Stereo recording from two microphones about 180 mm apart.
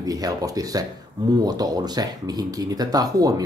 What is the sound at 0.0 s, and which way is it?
Speech, 20° right (ahead or behind).